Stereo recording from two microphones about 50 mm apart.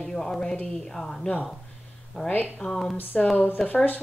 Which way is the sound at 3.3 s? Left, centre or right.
Left.